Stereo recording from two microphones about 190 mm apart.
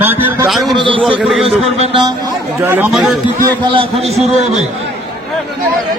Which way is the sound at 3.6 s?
25° right (ahead or behind).